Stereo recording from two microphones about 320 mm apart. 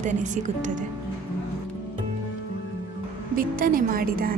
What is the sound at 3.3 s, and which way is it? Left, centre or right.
A woman's voice, right.